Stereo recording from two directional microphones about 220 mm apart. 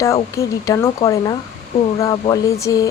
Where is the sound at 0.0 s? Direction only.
15° left (ahead or behind).